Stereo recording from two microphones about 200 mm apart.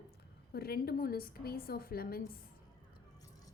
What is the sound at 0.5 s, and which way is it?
A woman's voice, 50° left (ahead or behind).